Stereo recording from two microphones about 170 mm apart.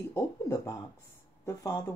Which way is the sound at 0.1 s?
20° left (ahead or behind).